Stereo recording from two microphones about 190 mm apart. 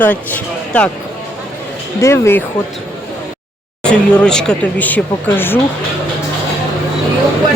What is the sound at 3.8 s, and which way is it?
Speech, 5° left (ahead or behind).